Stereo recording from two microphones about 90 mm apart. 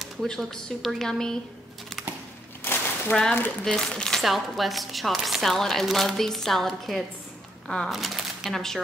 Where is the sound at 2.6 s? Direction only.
20° left (ahead or behind).